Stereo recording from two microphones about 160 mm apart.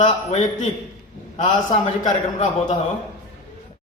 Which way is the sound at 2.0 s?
45° left (ahead or behind).